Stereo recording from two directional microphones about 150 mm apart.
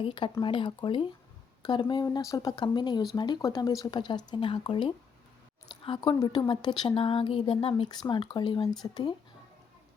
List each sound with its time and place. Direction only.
0.0 s speech: 35° left (ahead or behind)